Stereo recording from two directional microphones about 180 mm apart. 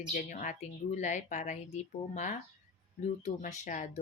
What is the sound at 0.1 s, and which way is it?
Speech, 45° left (ahead or behind).